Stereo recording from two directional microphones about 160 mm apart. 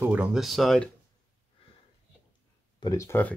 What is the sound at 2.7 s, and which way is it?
Speech, 20° left (ahead or behind).